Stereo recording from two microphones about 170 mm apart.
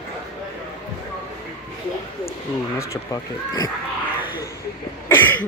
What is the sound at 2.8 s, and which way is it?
Speech, 20° left (ahead or behind).